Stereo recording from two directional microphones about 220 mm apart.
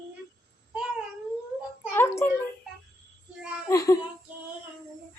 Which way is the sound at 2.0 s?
10° left (ahead or behind).